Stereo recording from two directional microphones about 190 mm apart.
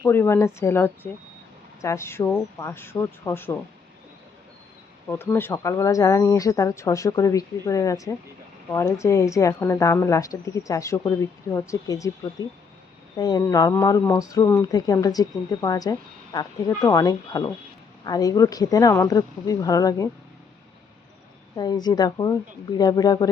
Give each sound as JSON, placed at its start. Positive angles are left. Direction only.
{"t": 0.0, "sound": "a woman's voice", "side_deg": 15}
{"t": 5.0, "sound": "a woman's voice", "side_deg": 10}
{"t": 21.5, "sound": "speech", "side_deg": 20}